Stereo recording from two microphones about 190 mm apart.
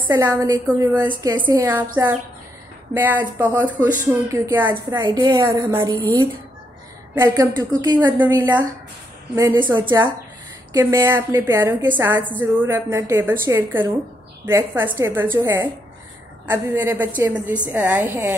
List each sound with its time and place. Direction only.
0.1 s a woman's voice: 15° right (ahead or behind)
2.9 s a woman's voice: 10° right (ahead or behind)